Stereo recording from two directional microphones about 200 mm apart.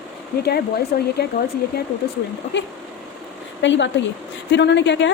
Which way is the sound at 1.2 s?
55° left (ahead or behind).